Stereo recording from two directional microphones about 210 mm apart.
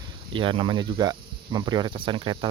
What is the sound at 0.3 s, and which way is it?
Speech, 25° right (ahead or behind).